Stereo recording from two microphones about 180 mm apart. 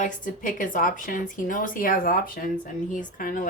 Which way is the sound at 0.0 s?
50° left (ahead or behind).